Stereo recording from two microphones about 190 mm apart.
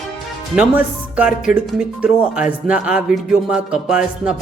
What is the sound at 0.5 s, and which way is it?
Speech, 5° right (ahead or behind).